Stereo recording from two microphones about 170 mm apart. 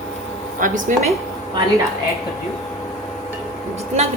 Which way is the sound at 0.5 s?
50° right (ahead or behind).